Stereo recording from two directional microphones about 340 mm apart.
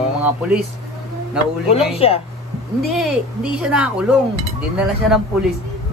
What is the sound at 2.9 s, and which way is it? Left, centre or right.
Speech, centre.